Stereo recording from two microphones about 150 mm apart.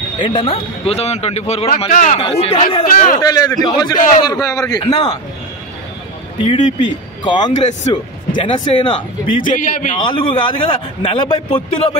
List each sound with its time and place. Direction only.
0.2 s a man's voice: 35° left (ahead or behind); by 2.1 s 50° left (ahead or behind)
2.1 s a man's voice: 40° left (ahead or behind)
2.9 s speech: 70° left (ahead or behind)
3.2 s a man's voice: 25° left (ahead or behind)
6.3 s a man's voice: 30° left (ahead or behind)
9.4 s a man's voice: 65° left (ahead or behind)
9.9 s a man's voice: 35° left (ahead or behind)